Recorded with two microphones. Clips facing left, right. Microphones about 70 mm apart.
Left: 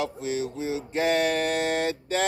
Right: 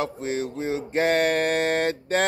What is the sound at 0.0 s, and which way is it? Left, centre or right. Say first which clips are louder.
Mantra: right 1 dB; right.